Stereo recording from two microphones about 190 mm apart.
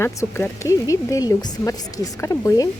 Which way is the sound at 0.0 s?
15° left (ahead or behind).